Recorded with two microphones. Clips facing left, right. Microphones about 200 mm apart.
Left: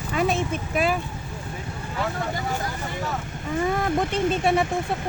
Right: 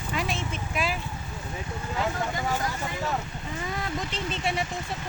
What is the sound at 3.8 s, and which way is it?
Speech, 55° left (ahead or behind).